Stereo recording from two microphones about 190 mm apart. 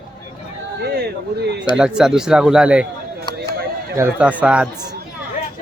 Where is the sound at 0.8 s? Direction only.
60° right (ahead or behind).